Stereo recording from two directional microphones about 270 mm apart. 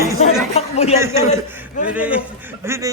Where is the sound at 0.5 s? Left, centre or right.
Left.